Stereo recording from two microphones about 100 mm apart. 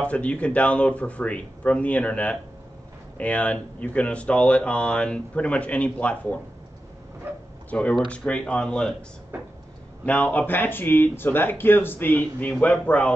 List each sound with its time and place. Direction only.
0.0 s speech: 10° left (ahead or behind)
7.7 s speech: 15° left (ahead or behind)
10.0 s speech: 15° left (ahead or behind)